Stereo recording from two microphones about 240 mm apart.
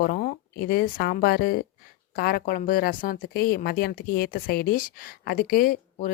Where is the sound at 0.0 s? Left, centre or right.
Left.